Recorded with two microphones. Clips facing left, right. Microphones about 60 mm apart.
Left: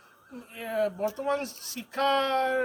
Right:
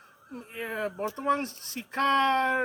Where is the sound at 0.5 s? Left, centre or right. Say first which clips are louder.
Left 4 dB; right.